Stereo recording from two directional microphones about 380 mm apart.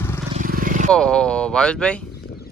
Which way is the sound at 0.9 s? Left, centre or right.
Centre.